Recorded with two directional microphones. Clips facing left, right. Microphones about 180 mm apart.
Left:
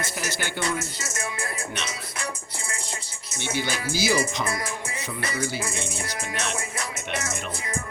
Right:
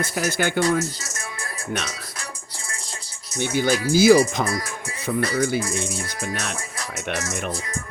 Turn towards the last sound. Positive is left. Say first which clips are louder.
# right 1 dB
turn(degrees=-50)  # may be behind; listen again after turning